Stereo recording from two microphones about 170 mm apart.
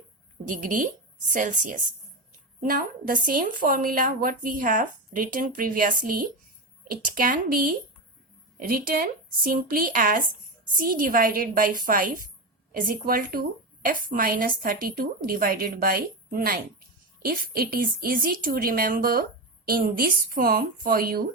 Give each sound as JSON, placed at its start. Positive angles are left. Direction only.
{"t": 0.4, "sound": "a woman's voice", "side_deg": -50}